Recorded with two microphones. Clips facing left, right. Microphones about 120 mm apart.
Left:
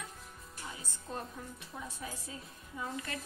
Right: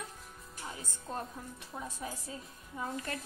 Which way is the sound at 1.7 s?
20° right (ahead or behind).